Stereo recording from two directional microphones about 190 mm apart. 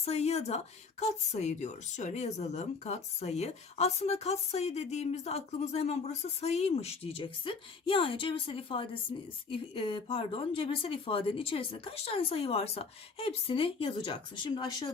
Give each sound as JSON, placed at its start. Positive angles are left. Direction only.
{"t": 0.0, "sound": "speech", "side_deg": 35}